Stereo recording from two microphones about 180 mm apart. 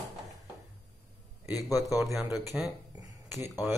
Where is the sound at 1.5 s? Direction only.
20° left (ahead or behind).